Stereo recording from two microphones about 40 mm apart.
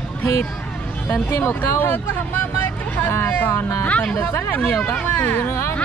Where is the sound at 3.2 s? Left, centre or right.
Left.